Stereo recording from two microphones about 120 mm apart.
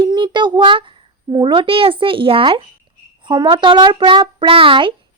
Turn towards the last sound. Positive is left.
turn(degrees=-45)  # may be behind; listen again after turning